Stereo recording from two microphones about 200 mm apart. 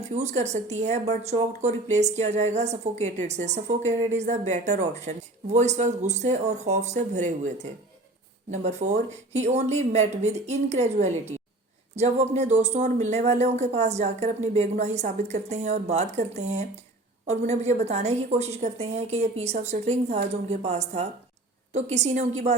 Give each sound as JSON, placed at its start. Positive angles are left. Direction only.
{"t": 0.1, "sound": "speech", "side_deg": -35}